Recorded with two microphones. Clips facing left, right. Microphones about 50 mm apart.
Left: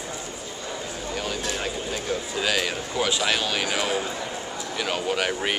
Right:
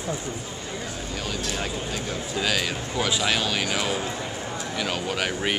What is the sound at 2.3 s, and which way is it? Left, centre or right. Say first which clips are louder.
A man's voice: right 1 dB; centre.